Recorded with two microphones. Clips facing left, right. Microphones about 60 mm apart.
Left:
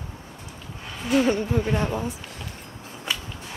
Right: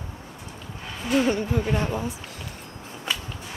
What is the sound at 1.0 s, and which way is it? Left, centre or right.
A woman's voice, centre.